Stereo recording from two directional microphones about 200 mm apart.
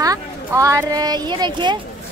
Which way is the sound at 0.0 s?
15° right (ahead or behind).